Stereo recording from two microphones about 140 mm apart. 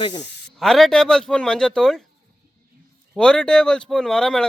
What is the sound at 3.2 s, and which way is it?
Speech, 5° left (ahead or behind).